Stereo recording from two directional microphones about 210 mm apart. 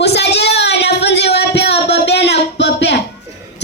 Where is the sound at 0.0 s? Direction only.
55° left (ahead or behind).